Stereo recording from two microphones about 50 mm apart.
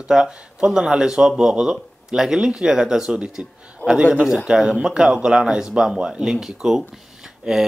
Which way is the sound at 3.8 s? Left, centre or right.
Left.